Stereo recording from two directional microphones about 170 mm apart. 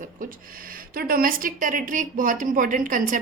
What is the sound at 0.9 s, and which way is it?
A woman's voice, 55° right (ahead or behind).